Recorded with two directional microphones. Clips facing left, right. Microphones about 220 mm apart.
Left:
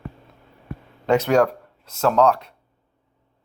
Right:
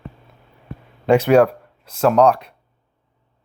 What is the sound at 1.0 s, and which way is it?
Speech, 10° right (ahead or behind).